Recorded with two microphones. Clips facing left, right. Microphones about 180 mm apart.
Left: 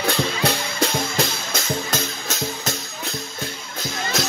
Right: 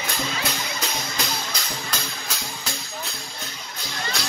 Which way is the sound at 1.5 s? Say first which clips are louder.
Left 7 dB; 45° left (ahead or behind).